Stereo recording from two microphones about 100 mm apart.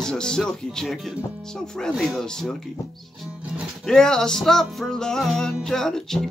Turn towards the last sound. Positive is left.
turn(degrees=5)  # may be behind; listen again after turning